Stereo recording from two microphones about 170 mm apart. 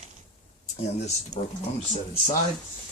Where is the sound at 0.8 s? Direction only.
40° left (ahead or behind).